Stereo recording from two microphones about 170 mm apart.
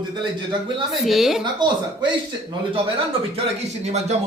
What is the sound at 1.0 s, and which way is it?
Speech, centre (ahead or behind).